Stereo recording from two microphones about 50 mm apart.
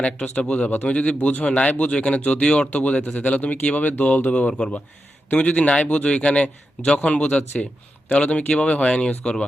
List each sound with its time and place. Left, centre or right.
0.0 s speech: centre